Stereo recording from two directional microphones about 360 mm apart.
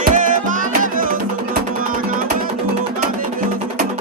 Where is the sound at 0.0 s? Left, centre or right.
Right.